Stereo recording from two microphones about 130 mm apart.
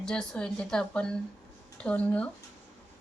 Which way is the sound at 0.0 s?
5° left (ahead or behind).